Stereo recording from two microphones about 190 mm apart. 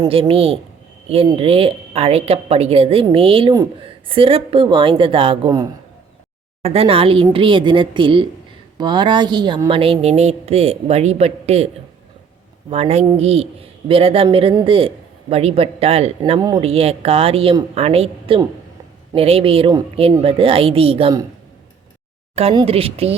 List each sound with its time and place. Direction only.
0.1 s speech: 30° right (ahead or behind)
12.7 s speech: 35° right (ahead or behind)
16.4 s speech: 20° right (ahead or behind)
16.6 s speech: 30° right (ahead or behind)
22.4 s speech: 30° right (ahead or behind)